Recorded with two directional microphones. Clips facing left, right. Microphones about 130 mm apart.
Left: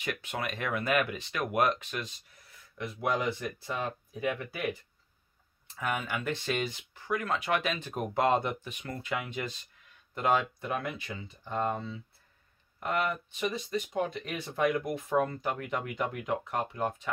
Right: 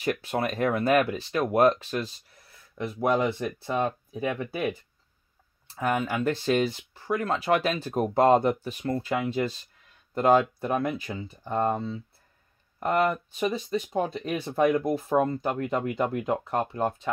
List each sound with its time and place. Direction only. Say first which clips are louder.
0.0 s speech: right 8 dB; 35° right (ahead or behind)
2.8 s speech: right 6 dB; 45° right (ahead or behind)
3.8 s speech: right 5 dB; 50° right (ahead or behind)
5.7 s speech: right 6 dB; 35° right (ahead or behind)